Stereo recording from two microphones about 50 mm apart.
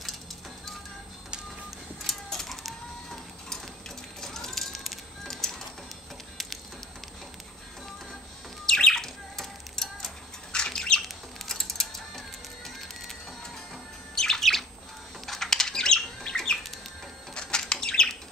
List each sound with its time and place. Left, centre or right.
2.0 s bird: centre
4.2 s a sound: centre
8.6 s bird: centre
11.0 s a sound: centre
14.1 s bird: centre
15.2 s rodents: centre
16.3 s bird: centre